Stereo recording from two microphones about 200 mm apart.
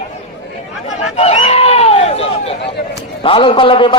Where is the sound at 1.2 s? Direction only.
30° left (ahead or behind).